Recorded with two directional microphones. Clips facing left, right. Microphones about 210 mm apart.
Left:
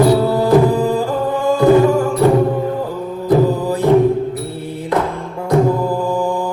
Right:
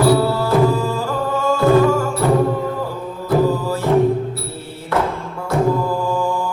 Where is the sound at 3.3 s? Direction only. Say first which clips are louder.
Left 3 dB; 15° left (ahead or behind).